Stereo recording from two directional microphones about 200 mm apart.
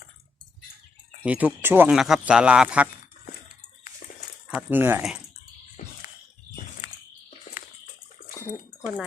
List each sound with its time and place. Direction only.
1.2 s speech: 5° right (ahead or behind)
4.4 s speech: 10° right (ahead or behind)
5.8 s a sound: 40° left (ahead or behind)
8.3 s bathtub: 15° left (ahead or behind)